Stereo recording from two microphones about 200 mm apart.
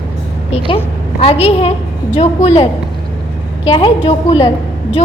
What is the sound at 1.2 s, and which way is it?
A woman's voice, 30° left (ahead or behind).